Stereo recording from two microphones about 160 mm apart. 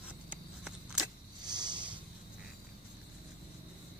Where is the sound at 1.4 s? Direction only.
25° right (ahead or behind).